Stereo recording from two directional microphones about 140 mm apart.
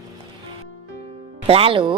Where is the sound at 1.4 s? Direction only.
40° right (ahead or behind).